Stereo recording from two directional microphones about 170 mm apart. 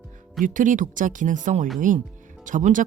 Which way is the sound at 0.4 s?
50° right (ahead or behind).